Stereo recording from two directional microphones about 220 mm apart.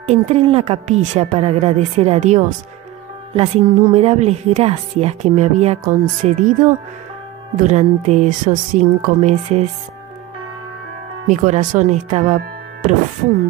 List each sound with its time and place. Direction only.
0.0 s a woman's voice: 30° right (ahead or behind)
11.2 s a woman's voice: 35° right (ahead or behind)